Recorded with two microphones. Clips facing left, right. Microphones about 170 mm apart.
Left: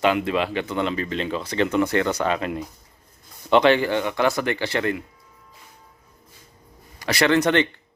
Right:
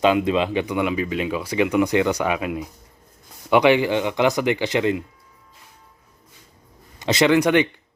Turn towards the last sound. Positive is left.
turn(degrees=-10)  # may be behind; listen again after turning